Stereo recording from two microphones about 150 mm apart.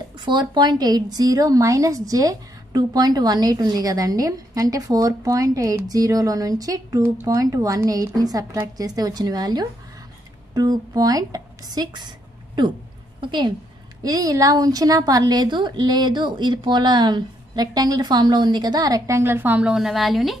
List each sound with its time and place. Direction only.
0.2 s a woman's voice: 30° right (ahead or behind)
13.2 s a woman's voice: 30° right (ahead or behind); by 20.3 s centre (ahead or behind)